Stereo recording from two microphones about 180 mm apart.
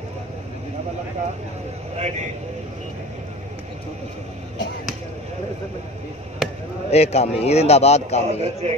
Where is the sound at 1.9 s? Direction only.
40° right (ahead or behind).